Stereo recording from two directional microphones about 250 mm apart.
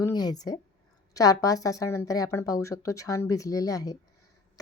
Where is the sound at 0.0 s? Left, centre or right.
Centre.